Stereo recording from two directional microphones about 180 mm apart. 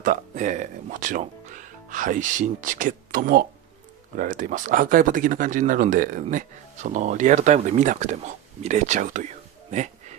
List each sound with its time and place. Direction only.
0.0 s speech: 45° right (ahead or behind)